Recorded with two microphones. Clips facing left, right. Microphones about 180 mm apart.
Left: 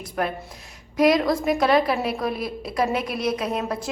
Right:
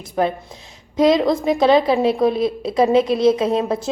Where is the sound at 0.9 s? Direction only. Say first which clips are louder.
Right 4 dB; 25° right (ahead or behind).